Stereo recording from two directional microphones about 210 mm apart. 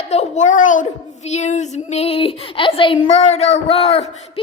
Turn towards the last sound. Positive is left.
turn(degrees=30)  # may be behind; listen again after turning